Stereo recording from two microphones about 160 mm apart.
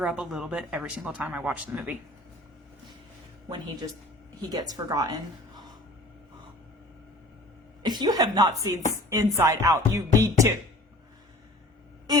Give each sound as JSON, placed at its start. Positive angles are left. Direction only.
{"t": 0.0, "sound": "speech", "side_deg": 0}
{"t": 4.4, "sound": "music", "side_deg": -25}
{"t": 7.8, "sound": "music", "side_deg": -25}